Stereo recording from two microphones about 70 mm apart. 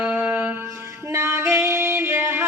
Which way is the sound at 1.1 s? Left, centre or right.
Right.